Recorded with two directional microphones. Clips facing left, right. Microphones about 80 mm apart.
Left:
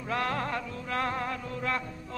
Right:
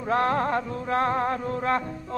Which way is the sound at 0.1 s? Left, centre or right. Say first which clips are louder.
Right 8 dB; right.